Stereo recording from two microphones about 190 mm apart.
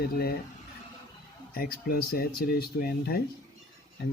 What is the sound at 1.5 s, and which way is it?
Speech, 50° left (ahead or behind).